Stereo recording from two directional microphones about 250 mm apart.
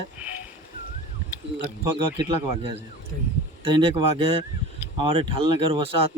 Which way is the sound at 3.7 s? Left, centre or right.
Right.